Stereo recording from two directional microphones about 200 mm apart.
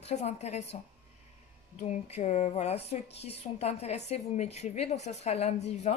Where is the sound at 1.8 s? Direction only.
30° left (ahead or behind).